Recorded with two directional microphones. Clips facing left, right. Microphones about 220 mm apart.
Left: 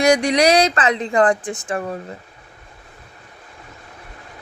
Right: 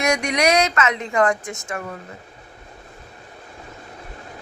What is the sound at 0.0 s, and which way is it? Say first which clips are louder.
Speech: left 5 dB; 35° left (ahead or behind).